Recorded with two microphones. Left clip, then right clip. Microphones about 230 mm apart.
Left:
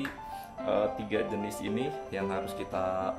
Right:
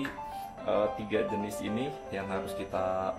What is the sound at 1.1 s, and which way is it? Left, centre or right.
Speech, left.